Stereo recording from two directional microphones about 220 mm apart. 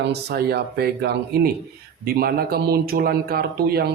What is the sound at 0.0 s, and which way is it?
Speech, 50° right (ahead or behind).